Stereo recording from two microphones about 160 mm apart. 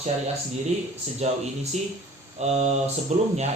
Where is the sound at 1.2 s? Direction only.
45° right (ahead or behind).